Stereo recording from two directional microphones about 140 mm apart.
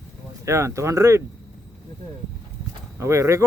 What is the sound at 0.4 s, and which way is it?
Speech, 20° right (ahead or behind).